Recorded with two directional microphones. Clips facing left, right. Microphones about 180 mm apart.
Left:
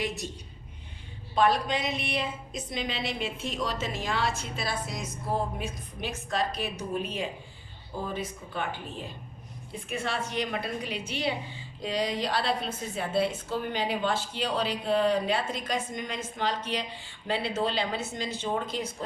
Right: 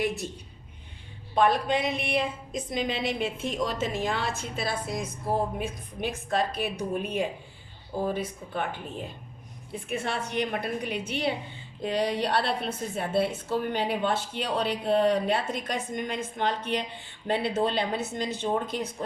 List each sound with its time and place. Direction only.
0.0 s a woman's voice: 60° right (ahead or behind)
1.4 s a woman's voice: 55° right (ahead or behind)
10.1 s a woman's voice: 55° right (ahead or behind)